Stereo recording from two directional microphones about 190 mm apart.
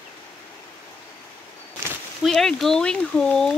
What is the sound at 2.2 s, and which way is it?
Speech, centre (ahead or behind).